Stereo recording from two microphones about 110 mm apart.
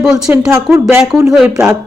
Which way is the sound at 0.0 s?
5° right (ahead or behind).